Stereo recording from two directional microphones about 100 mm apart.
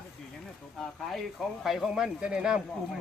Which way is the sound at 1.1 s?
Centre (ahead or behind).